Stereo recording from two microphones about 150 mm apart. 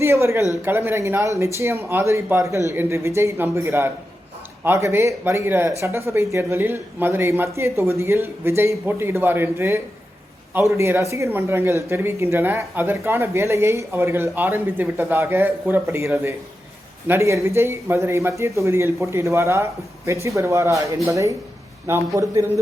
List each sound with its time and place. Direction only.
0.0 s a man's voice: 20° right (ahead or behind)